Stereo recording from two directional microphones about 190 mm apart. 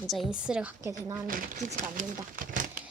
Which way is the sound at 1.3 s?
45° right (ahead or behind).